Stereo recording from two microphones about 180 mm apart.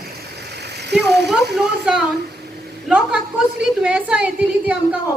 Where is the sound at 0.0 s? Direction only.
65° right (ahead or behind).